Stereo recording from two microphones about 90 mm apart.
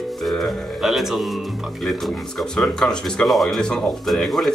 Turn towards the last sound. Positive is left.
turn(degrees=5)  # may be behind; listen again after turning